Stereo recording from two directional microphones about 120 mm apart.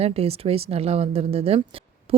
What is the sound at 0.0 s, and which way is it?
Speech, 60° right (ahead or behind).